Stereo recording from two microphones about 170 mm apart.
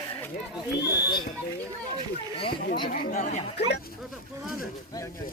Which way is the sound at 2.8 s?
50° left (ahead or behind).